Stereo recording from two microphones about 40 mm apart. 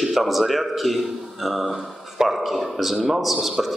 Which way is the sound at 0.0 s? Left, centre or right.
Centre.